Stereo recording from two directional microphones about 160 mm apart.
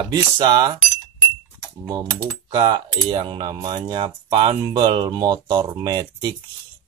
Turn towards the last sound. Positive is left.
turn(degrees=-25)  # may be behind; listen again after turning